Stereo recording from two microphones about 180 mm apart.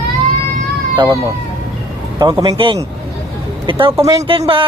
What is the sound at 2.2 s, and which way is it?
Speech, 20° right (ahead or behind).